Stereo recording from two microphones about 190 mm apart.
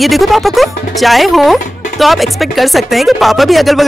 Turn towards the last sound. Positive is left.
turn(degrees=0)  # may be behind; listen again after turning